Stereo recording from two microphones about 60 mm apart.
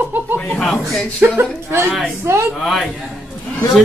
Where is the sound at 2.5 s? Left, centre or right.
Centre.